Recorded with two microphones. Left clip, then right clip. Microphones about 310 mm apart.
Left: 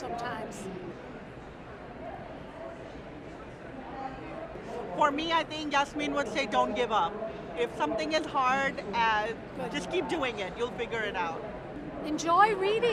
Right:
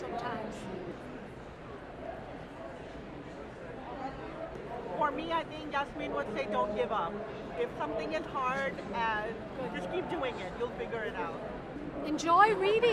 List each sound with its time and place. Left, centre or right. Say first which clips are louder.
4.9 s speech: left 5 dB; left
12.0 s speech: left 1 dB; centre